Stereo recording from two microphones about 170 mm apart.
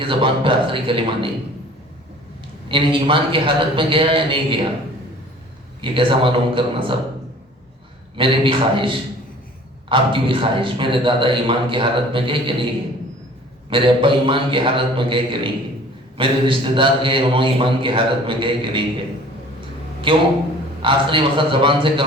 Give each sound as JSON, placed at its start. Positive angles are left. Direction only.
{"t": 0.0, "sound": "a man's voice", "side_deg": -30}
{"t": 2.6, "sound": "a man's voice", "side_deg": -30}
{"t": 5.8, "sound": "a man's voice", "side_deg": -30}
{"t": 8.1, "sound": "a man's voice", "side_deg": -30}
{"t": 13.7, "sound": "a man's voice", "side_deg": -30}
{"t": 20.1, "sound": "a man's voice", "side_deg": -30}